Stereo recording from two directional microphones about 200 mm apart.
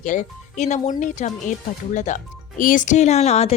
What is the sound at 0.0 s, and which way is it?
Speech, 40° left (ahead or behind).